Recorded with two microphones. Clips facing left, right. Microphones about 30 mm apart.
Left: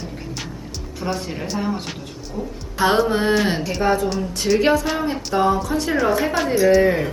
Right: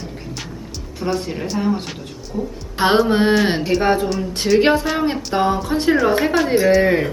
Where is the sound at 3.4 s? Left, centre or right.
Right.